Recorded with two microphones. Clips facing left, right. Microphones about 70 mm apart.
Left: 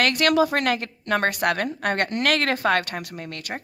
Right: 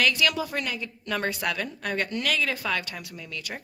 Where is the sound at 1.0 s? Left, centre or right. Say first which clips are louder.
Left 6 dB; left.